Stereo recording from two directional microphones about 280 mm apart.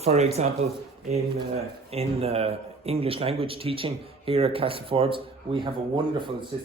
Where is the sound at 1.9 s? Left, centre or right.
Right.